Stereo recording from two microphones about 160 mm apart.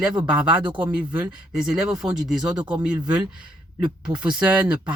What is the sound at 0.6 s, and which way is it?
Speech, 30° right (ahead or behind).